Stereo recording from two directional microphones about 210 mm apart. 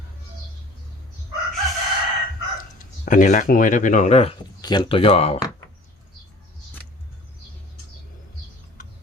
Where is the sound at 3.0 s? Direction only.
35° left (ahead or behind).